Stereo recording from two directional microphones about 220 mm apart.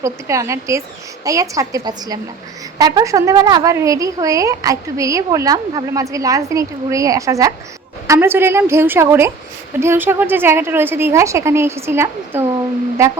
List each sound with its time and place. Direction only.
0.0 s a woman's voice: 15° right (ahead or behind)